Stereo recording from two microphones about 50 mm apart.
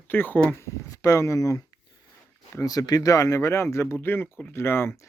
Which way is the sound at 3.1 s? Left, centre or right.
Left.